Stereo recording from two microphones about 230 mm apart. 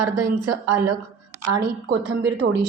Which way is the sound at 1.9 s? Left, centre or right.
Right.